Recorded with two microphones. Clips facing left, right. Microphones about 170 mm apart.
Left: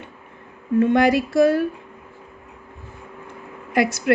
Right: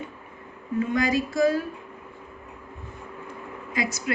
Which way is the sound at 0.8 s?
65° left (ahead or behind).